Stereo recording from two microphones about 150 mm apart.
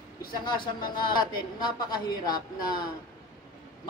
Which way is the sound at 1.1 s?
30° left (ahead or behind).